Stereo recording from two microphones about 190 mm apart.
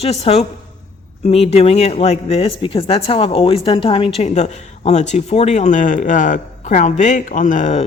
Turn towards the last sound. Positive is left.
turn(degrees=40)  # may be behind; listen again after turning